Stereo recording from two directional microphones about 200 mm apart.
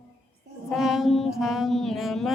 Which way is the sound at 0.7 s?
Centre (ahead or behind).